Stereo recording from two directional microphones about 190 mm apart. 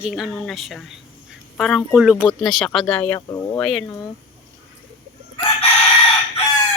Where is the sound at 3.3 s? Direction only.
15° left (ahead or behind).